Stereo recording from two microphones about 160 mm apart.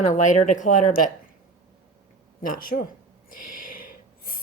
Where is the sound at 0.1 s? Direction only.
50° left (ahead or behind).